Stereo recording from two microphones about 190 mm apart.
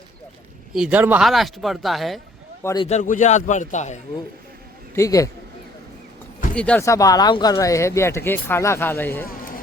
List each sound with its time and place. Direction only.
0.7 s speech: 5° right (ahead or behind)
2.8 s a man's voice: 40° left (ahead or behind)
4.9 s speech: 15° left (ahead or behind)
6.5 s speech: 5° left (ahead or behind)
9.2 s a sound: 50° left (ahead or behind)